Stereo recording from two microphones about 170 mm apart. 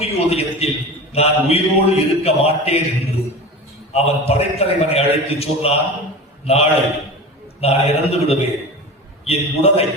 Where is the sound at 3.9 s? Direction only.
35° left (ahead or behind).